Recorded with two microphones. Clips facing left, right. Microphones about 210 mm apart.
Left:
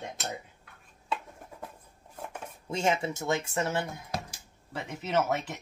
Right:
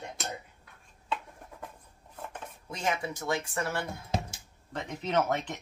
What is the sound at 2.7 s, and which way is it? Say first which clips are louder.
Speech: left 4 dB; 25° left (ahead or behind).